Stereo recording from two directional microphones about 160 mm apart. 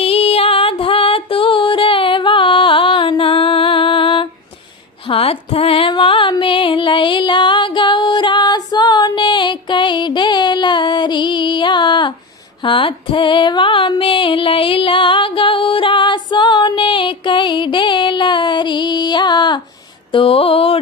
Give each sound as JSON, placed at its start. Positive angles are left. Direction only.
{"t": 0.0, "sound": "music", "side_deg": 35}
{"t": 12.6, "sound": "female singing", "side_deg": 30}
{"t": 20.1, "sound": "mantra", "side_deg": 35}